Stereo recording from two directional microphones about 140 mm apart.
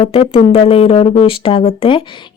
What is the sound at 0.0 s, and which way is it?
Speech, 40° left (ahead or behind).